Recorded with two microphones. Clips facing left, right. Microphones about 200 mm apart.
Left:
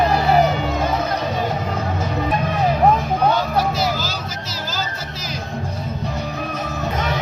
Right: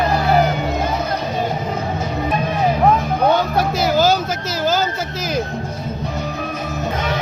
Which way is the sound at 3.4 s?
55° right (ahead or behind).